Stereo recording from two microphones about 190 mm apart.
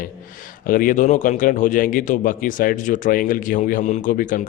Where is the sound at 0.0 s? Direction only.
45° left (ahead or behind).